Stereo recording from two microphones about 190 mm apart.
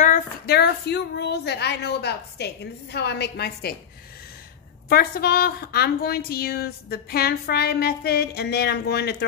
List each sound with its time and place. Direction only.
0.5 s a woman's voice: 60° left (ahead or behind)
4.8 s a woman's voice: 55° left (ahead or behind)